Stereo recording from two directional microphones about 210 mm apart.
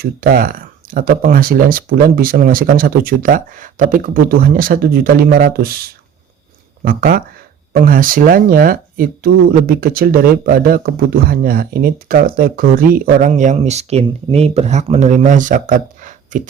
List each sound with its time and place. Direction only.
0.0 s speech: 45° right (ahead or behind)